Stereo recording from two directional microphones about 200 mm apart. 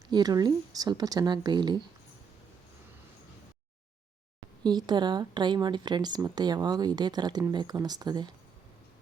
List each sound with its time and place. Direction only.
0.1 s speech: 20° right (ahead or behind)
4.6 s speech: 20° right (ahead or behind)